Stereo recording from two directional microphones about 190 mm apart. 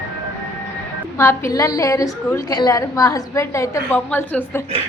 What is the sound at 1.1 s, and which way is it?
A woman's voice, 15° left (ahead or behind).